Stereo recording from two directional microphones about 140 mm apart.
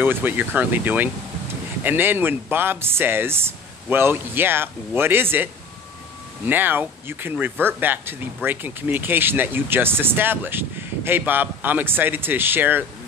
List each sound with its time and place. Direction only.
0.0 s speech: 15° right (ahead or behind)